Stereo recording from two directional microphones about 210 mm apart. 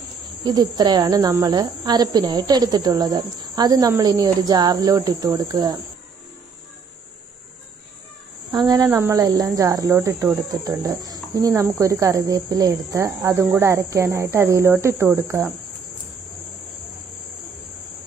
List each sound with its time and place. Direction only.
0.4 s speech: 20° right (ahead or behind)
8.5 s speech: 15° right (ahead or behind)